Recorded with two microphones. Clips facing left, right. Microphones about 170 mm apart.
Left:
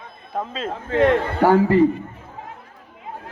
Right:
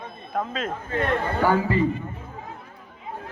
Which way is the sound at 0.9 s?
90° left.